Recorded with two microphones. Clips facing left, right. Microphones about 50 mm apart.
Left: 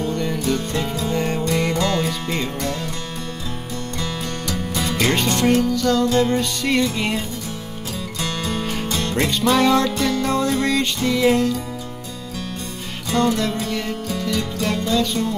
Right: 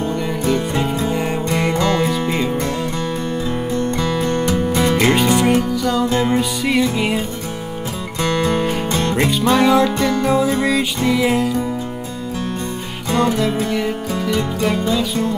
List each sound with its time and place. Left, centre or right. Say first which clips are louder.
0.1 s music: right 3 dB; centre
1.4 s music: right 2 dB; right
3.7 s music: right 8 dB; right
4.9 s music: right 3 dB; centre
6.0 s music: right 1 dB; right
6.7 s music: right 2 dB; centre
8.2 s music: right 9 dB; right
9.4 s music: right 2 dB; centre
9.9 s music: right 3 dB; right
10.2 s music: right 5 dB; centre
13.1 s music: right 2 dB; centre